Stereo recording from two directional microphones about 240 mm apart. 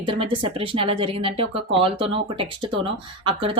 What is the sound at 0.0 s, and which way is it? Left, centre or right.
Speech, right.